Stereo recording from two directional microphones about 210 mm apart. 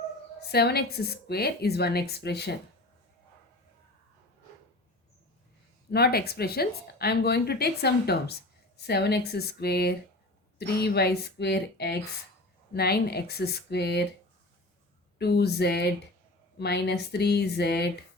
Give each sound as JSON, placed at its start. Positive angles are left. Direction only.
{"t": 0.3, "sound": "speech", "side_deg": 50}
{"t": 5.9, "sound": "speech", "side_deg": 50}
{"t": 15.2, "sound": "speech", "side_deg": 50}